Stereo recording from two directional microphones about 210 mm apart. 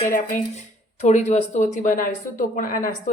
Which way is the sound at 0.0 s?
35° left (ahead or behind).